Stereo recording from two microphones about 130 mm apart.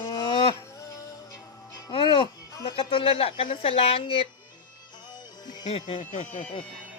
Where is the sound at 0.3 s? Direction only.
40° left (ahead or behind).